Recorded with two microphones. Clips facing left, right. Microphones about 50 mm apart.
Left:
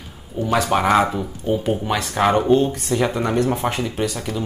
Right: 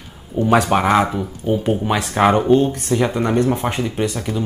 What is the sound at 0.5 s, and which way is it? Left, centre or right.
Speech, right.